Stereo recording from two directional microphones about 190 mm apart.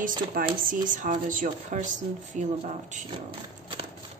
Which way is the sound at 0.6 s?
45° right (ahead or behind).